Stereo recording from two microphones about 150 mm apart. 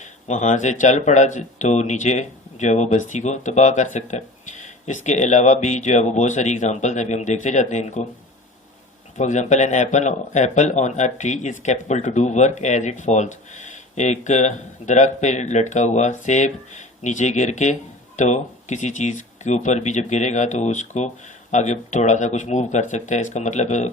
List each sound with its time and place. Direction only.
0.0 s speech: 50° left (ahead or behind)
9.1 s speech: 50° left (ahead or behind)